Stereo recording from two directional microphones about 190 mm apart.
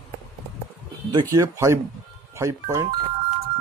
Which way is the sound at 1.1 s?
20° right (ahead or behind).